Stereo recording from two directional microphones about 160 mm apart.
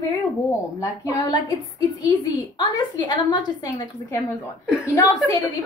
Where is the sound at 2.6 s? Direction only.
25° left (ahead or behind).